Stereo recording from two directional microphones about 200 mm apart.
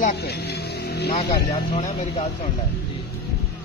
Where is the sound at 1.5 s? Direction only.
35° left (ahead or behind).